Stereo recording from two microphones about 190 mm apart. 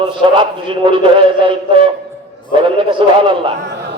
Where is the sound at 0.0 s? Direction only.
25° right (ahead or behind).